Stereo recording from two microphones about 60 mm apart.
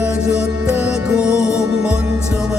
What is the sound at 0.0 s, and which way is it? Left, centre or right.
Music, centre.